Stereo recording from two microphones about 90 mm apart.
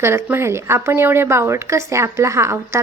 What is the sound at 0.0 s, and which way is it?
A woman's voice, 30° right (ahead or behind).